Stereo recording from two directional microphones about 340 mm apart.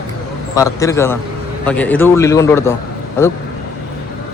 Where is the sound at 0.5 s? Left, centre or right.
Centre.